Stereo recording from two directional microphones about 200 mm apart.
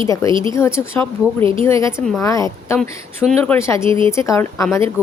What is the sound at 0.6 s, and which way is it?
A woman's voice, 15° left (ahead or behind).